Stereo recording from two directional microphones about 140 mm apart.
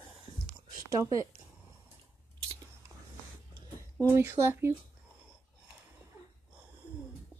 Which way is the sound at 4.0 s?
20° right (ahead or behind).